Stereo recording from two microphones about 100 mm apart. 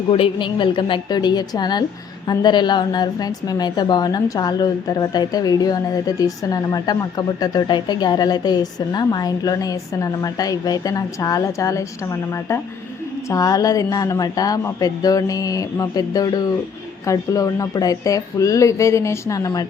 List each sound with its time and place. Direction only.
0.1 s a woman's voice: 60° left (ahead or behind); by 19.6 s 35° left (ahead or behind)